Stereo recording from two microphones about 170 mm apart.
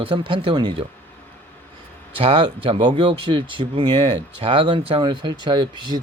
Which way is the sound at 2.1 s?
30° right (ahead or behind).